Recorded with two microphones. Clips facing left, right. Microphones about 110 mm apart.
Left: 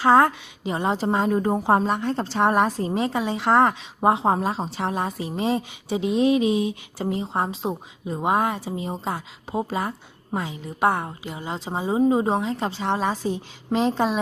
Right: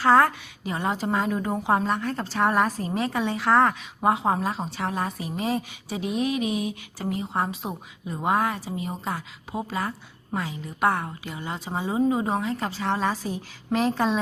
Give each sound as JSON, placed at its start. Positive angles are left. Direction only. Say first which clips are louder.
{"t": 0.0, "sound": "speech", "louder": "left 2 dB", "side_deg": 20}
{"t": 1.9, "sound": "speech", "louder": "left 3 dB", "side_deg": 25}